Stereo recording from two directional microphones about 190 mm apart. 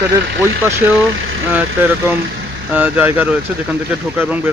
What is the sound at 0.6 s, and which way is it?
Speech, 10° right (ahead or behind).